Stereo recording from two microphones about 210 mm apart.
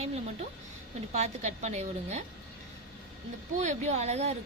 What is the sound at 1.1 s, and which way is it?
A woman's voice, 30° right (ahead or behind).